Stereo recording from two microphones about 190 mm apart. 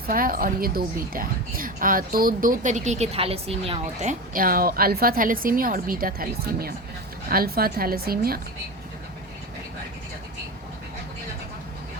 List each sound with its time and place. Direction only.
0.1 s a woman's voice: 50° right (ahead or behind); by 4.1 s 30° right (ahead or behind)
4.4 s a woman's voice: 50° right (ahead or behind)